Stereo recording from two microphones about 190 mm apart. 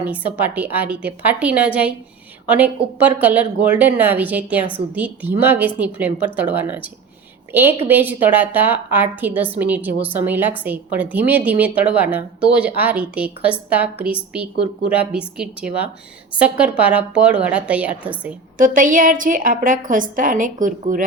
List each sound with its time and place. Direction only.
0.0 s a woman's voice: 10° right (ahead or behind)
18.5 s a woman's voice: 45° right (ahead or behind)